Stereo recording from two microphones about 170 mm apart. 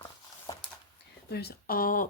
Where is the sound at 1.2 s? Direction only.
70° left (ahead or behind).